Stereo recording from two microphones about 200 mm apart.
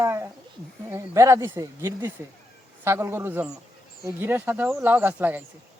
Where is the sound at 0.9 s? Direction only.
15° right (ahead or behind).